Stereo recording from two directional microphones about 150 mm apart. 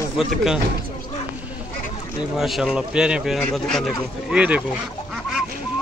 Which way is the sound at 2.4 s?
Centre (ahead or behind).